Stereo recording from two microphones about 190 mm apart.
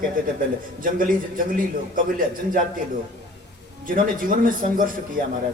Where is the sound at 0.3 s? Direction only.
45° right (ahead or behind).